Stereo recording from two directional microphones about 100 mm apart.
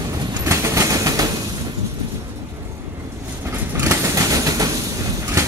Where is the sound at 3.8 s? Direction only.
30° right (ahead or behind).